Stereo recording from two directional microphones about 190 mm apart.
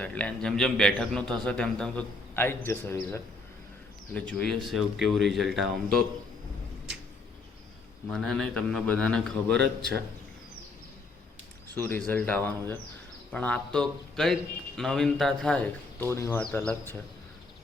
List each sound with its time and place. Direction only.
0.0 s a man's voice: 5° left (ahead or behind)
8.1 s speech: 5° left (ahead or behind)
11.7 s a man's voice: 10° left (ahead or behind)